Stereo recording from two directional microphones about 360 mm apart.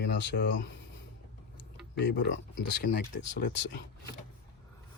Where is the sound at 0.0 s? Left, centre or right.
Left.